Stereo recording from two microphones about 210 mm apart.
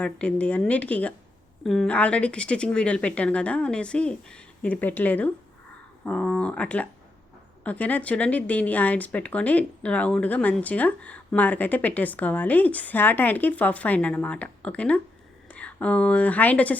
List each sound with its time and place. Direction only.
0.0 s a woman's voice: 5° left (ahead or behind)